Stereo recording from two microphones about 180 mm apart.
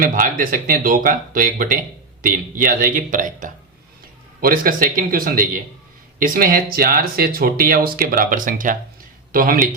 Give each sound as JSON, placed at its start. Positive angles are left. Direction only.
{"t": 0.0, "sound": "speech", "side_deg": -50}